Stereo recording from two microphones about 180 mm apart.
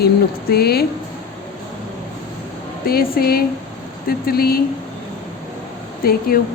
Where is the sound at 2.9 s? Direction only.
55° left (ahead or behind).